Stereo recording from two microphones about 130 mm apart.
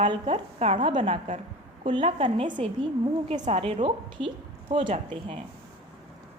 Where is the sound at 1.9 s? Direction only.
40° right (ahead or behind).